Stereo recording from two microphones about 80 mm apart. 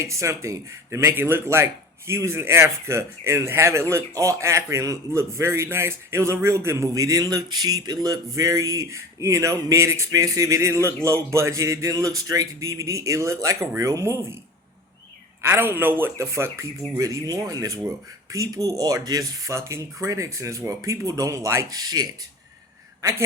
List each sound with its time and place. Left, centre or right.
0.0 s a man's voice: right
15.4 s a man's voice: right
21.8 s speech: right
23.0 s speech: right